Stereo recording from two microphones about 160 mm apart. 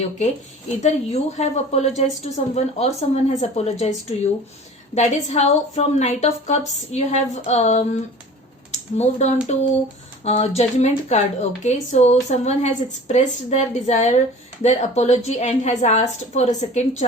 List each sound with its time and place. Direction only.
0.8 s speech: 45° left (ahead or behind)